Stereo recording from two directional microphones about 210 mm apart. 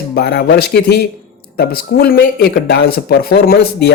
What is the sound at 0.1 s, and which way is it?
Speech, 50° left (ahead or behind).